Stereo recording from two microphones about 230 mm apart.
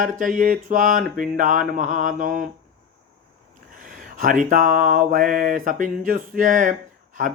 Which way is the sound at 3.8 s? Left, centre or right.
Right.